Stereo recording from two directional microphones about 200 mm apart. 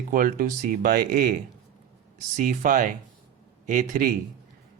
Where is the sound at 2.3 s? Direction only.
40° right (ahead or behind).